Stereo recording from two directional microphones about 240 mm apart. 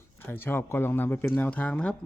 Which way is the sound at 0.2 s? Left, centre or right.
Centre.